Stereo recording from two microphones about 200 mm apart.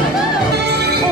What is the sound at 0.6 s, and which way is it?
Music, 55° right (ahead or behind).